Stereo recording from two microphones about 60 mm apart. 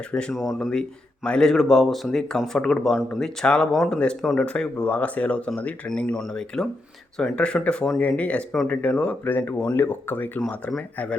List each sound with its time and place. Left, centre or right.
0.1 s speech: centre
0.3 s speech: centre
3.9 s speech: centre
6.1 s speech: centre
9.2 s speech: left